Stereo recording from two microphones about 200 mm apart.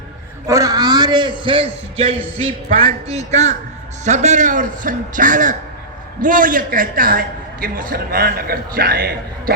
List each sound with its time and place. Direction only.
0.4 s a man's voice: 15° right (ahead or behind); by 9.6 s 50° right (ahead or behind)